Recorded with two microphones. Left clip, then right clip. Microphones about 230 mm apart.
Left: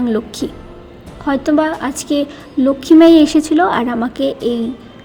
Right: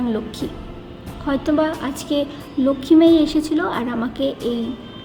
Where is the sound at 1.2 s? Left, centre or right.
Left.